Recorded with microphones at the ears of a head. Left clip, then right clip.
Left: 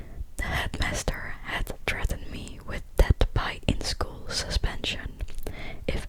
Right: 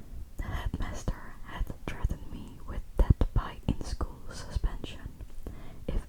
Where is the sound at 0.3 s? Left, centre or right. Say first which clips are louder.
Left 11 dB; left.